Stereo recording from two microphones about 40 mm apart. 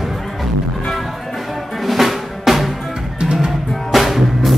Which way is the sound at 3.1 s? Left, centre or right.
Right.